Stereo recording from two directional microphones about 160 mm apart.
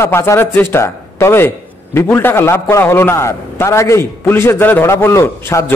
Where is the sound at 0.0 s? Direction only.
15° left (ahead or behind).